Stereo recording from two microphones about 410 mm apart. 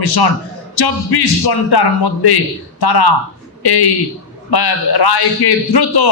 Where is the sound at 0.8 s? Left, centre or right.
Left.